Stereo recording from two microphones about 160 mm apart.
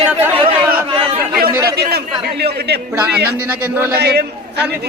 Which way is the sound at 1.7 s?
85° right.